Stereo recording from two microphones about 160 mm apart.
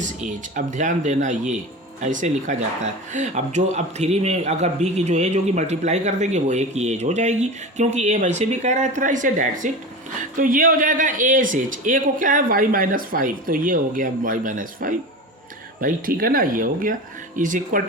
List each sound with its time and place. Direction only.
0.0 s a man's voice: 50° right (ahead or behind)